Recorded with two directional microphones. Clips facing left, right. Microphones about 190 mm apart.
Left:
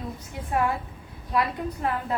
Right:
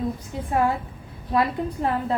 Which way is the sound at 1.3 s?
30° right (ahead or behind).